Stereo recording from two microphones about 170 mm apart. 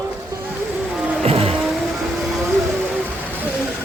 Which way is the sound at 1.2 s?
35° right (ahead or behind).